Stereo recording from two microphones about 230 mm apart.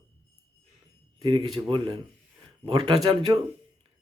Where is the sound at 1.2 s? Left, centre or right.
Right.